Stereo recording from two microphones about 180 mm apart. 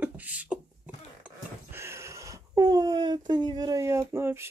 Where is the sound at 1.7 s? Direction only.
15° right (ahead or behind).